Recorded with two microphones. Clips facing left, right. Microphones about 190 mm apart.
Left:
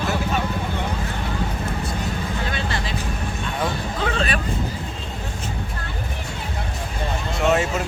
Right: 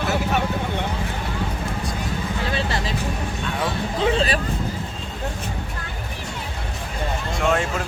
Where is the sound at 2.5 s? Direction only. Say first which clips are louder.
Right 2 dB; 35° right (ahead or behind).